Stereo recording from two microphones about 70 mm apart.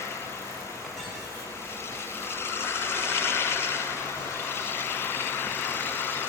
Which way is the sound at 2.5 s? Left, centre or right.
Left.